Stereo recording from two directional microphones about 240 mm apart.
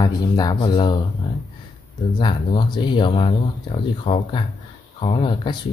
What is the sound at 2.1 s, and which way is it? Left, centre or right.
Speech, centre.